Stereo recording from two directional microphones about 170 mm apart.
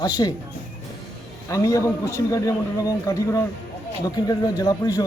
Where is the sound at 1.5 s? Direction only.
20° left (ahead or behind).